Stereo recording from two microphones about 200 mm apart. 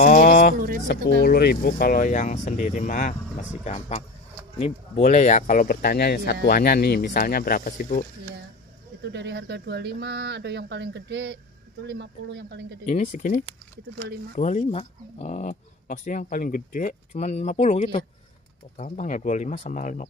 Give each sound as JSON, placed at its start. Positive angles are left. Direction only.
{"t": 0.0, "sound": "a sound", "side_deg": 40}
{"t": 0.8, "sound": "speech", "side_deg": 50}
{"t": 9.0, "sound": "speech", "side_deg": -60}
{"t": 12.8, "sound": "speech", "side_deg": 35}
{"t": 13.9, "sound": "speech", "side_deg": -55}
{"t": 14.3, "sound": "speech", "side_deg": 35}